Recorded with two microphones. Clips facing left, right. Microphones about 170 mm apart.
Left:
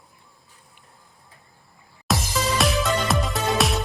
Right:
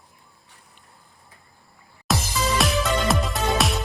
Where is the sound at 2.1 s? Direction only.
Centre (ahead or behind).